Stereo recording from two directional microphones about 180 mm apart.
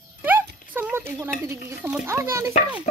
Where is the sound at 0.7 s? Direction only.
10° right (ahead or behind).